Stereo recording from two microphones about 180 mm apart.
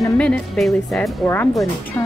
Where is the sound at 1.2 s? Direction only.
15° left (ahead or behind).